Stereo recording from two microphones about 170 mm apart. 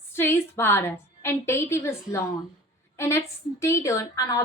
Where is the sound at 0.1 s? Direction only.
15° left (ahead or behind).